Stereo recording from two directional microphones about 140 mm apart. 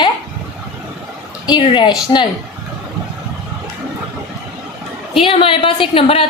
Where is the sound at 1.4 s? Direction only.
30° left (ahead or behind).